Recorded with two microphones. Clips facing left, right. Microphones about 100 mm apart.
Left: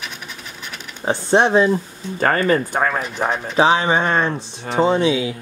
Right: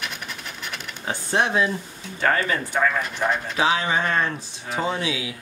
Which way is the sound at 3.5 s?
30° left (ahead or behind).